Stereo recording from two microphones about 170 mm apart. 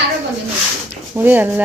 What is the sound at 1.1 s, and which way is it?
Speech, 10° right (ahead or behind).